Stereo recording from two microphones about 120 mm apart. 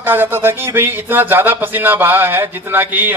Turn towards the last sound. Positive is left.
turn(degrees=-15)  # may be behind; listen again after turning